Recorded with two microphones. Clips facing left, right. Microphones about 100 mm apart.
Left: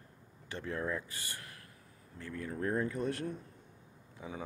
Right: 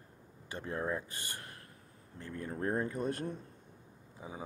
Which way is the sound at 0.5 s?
25° right (ahead or behind).